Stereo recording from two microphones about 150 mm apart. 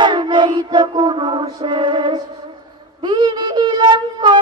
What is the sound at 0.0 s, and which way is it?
Music, 30° right (ahead or behind).